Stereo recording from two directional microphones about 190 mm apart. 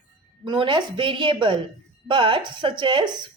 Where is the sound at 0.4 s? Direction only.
25° right (ahead or behind).